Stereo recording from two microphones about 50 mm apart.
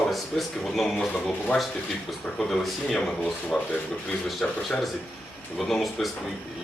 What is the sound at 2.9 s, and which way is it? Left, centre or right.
Speech, centre.